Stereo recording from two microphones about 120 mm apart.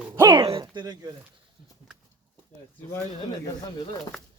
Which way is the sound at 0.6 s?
35° right (ahead or behind).